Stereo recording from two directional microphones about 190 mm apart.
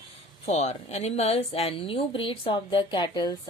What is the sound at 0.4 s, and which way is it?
A woman's voice, 35° left (ahead or behind).